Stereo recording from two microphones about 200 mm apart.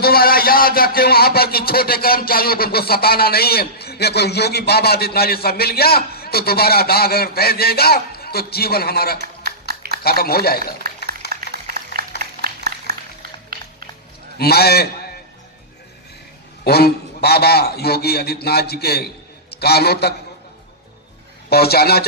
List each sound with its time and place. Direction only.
0.0 s a man's voice: 50° left (ahead or behind)
9.2 s a sound: 50° right (ahead or behind)
10.0 s a man's voice: 50° left (ahead or behind)
11.3 s a sound: 50° right (ahead or behind)
13.5 s music: 45° right (ahead or behind)
14.3 s a man's voice: 50° left (ahead or behind)
16.6 s a man's voice: 50° left (ahead or behind)
21.5 s a man's voice: 50° left (ahead or behind)